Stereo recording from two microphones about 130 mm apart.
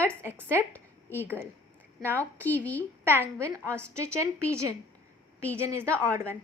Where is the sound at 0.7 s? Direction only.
15° left (ahead or behind).